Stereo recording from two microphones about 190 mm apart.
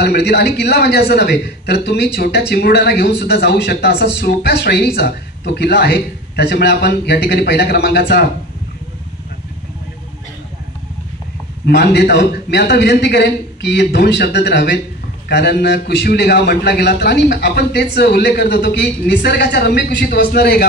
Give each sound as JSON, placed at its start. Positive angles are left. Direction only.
{"t": 0.0, "sound": "a man's voice", "side_deg": 60}
{"t": 11.6, "sound": "a man's voice", "side_deg": 60}